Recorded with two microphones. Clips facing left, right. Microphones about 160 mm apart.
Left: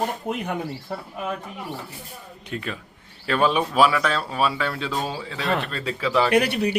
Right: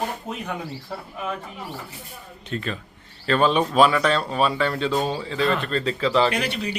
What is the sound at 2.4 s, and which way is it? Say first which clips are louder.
Speech: right 2 dB; 10° left (ahead or behind).